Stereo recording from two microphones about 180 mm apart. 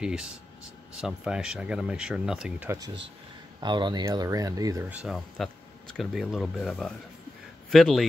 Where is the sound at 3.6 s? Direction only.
25° right (ahead or behind).